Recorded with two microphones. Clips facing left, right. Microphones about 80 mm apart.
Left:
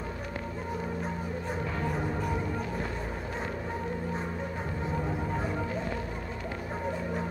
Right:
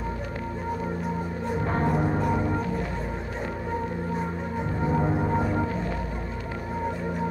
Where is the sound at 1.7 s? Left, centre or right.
Right.